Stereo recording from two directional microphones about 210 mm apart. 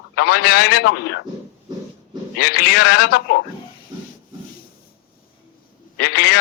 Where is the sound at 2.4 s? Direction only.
45° left (ahead or behind).